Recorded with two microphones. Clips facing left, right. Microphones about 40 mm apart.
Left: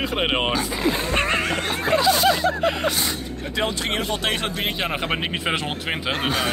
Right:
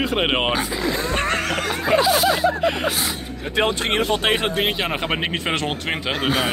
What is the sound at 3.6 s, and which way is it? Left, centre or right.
Speech, right.